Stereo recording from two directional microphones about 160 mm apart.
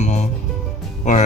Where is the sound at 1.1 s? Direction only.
50° left (ahead or behind).